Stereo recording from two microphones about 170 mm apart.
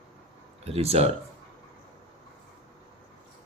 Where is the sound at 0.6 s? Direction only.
35° right (ahead or behind).